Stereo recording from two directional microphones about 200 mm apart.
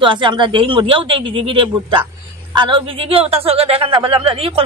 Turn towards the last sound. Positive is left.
turn(degrees=-25)  # may be behind; listen again after turning